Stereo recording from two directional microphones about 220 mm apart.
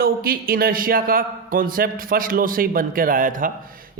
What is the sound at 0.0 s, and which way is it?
A man's voice, 45° right (ahead or behind).